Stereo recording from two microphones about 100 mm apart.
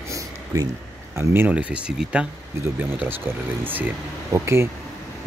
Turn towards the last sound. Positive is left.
turn(degrees=-25)  # may be behind; listen again after turning